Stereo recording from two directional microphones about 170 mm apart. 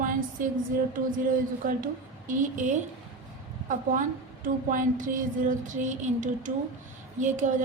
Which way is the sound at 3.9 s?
55° right (ahead or behind).